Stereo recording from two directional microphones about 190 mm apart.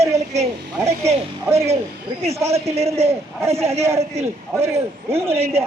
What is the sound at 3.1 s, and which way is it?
A man's voice, 15° right (ahead or behind).